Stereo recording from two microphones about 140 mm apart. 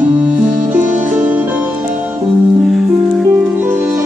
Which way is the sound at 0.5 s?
65° right (ahead or behind).